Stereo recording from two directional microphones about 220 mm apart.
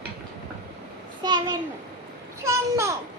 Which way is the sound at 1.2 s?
20° right (ahead or behind).